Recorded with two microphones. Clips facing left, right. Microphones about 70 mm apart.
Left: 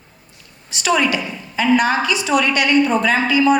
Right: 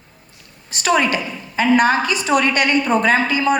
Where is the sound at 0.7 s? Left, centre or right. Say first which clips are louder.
Even; right.